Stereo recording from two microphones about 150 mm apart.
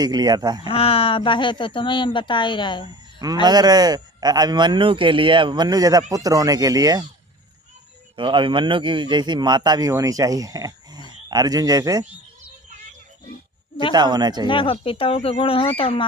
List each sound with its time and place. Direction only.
0.0 s a man's voice: 25° right (ahead or behind)
0.7 s speech: 40° left (ahead or behind)
3.4 s a man's voice: 25° right (ahead or behind)
8.1 s a man's voice: 35° right (ahead or behind)
13.9 s a man's voice: 30° right (ahead or behind)
14.4 s speech: 35° left (ahead or behind)